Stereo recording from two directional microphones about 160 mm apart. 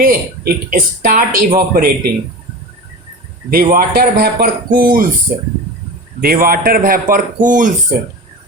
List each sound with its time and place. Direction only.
0.0 s speech: 65° right (ahead or behind)
3.5 s speech: 65° right (ahead or behind)
6.1 s speech: 65° right (ahead or behind)